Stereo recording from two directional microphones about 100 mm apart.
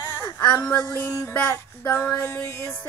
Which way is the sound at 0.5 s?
10° left (ahead or behind).